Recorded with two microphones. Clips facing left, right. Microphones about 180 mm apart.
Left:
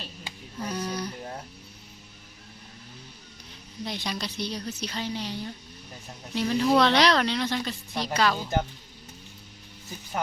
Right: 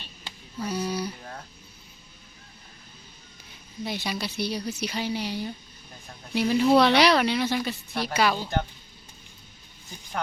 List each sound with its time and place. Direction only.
0.6 s a sound: 10° right (ahead or behind)
1.2 s music: 20° left (ahead or behind)
3.8 s speech: 5° right (ahead or behind)